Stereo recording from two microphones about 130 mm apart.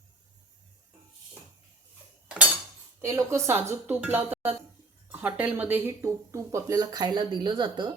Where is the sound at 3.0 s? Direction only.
20° right (ahead or behind).